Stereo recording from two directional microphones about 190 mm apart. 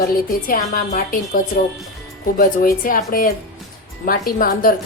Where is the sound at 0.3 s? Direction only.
45° left (ahead or behind).